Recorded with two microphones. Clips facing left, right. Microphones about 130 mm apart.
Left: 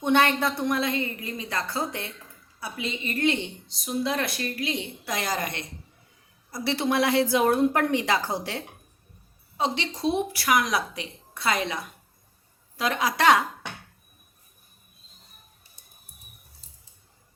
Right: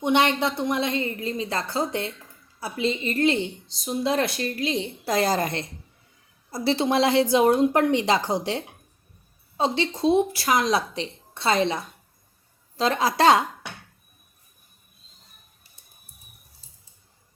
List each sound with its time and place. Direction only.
0.0 s speech: 15° right (ahead or behind)
0.8 s a woman's voice: 25° right (ahead or behind)
9.6 s speech: 30° right (ahead or behind)